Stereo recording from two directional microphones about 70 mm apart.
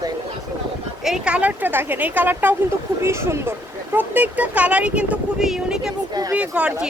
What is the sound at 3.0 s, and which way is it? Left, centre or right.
Speech, right.